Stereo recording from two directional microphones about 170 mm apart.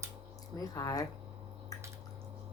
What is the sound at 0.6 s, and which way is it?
Speech, 20° left (ahead or behind).